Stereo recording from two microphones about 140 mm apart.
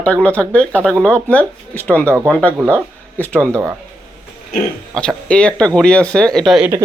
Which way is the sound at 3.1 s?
10° left (ahead or behind).